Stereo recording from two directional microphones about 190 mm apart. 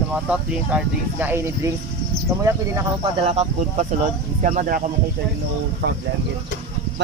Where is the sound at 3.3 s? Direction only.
35° right (ahead or behind).